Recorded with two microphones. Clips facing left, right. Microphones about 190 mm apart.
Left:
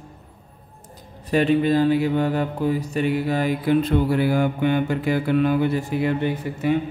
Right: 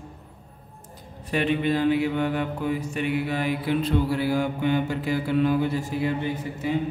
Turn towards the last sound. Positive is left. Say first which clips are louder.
# left 5 dB
turn(degrees=65)  # may be behind; listen again after turning